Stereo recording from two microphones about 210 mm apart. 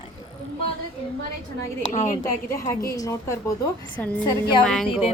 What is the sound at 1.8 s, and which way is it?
Speech, 35° left (ahead or behind).